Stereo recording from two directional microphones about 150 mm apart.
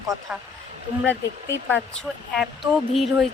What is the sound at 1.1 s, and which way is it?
Speech, 10° left (ahead or behind).